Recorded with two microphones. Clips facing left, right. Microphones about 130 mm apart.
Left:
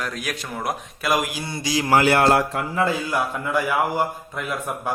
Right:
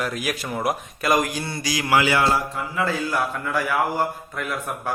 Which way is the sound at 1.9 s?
50° left (ahead or behind).